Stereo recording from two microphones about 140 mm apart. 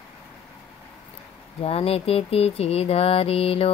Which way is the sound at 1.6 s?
45° left (ahead or behind).